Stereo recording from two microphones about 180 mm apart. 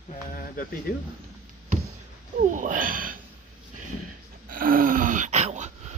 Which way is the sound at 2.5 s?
45° right (ahead or behind).